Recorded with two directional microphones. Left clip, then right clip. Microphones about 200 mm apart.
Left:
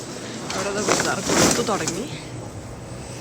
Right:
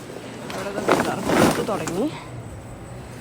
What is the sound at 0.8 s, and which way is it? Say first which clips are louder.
Speech: right 3 dB; 45° right (ahead or behind).